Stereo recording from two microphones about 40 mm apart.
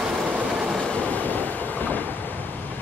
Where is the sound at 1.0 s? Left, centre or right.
Left.